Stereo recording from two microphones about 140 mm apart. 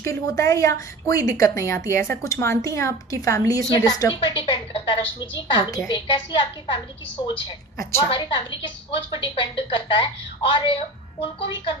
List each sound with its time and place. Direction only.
0.0 s a woman's voice: 20° left (ahead or behind)
4.2 s a woman's voice: 40° left (ahead or behind)
8.1 s a woman's voice: 35° left (ahead or behind)